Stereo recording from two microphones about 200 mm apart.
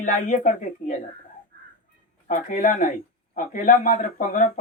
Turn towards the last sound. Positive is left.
turn(degrees=40)  # may be behind; listen again after turning